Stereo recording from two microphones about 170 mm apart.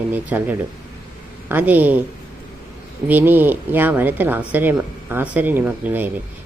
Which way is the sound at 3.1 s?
10° right (ahead or behind).